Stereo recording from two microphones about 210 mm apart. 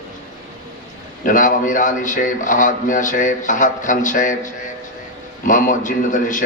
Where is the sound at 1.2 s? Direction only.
40° left (ahead or behind).